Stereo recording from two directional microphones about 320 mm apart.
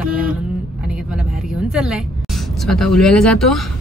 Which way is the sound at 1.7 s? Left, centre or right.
Centre.